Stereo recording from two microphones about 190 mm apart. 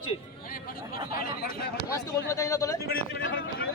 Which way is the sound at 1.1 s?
55° left (ahead or behind).